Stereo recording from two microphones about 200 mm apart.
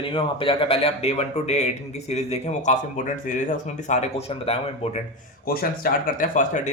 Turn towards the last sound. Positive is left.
turn(degrees=40)  # may be behind; listen again after turning